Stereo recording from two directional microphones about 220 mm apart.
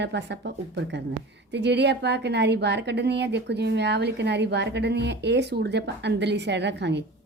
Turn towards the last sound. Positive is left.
turn(degrees=-50)  # may be behind; listen again after turning